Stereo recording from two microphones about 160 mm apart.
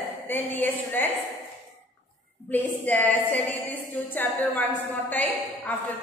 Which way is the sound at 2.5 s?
10° left (ahead or behind).